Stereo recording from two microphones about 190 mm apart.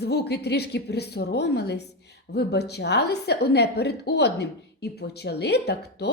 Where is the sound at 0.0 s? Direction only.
60° left (ahead or behind).